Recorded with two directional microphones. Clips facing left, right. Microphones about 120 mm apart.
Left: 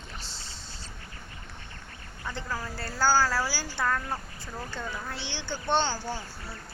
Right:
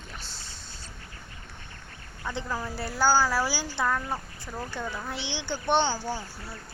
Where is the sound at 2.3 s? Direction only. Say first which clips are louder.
Right 3 dB; 15° right (ahead or behind).